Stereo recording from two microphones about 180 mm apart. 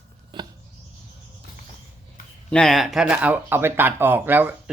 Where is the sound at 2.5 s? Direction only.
5° left (ahead or behind).